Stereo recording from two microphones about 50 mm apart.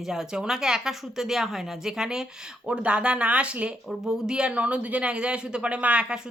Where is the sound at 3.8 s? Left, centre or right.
Centre.